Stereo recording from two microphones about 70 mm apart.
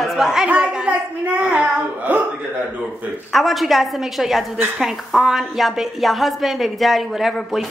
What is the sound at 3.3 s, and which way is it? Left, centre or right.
A woman's voice, centre.